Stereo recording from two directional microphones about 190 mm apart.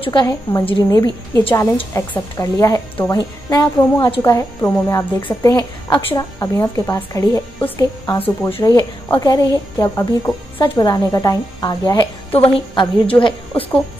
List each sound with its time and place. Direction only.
0.0 s a woman's voice: 20° left (ahead or behind)
8.5 s a woman's voice: 25° left (ahead or behind)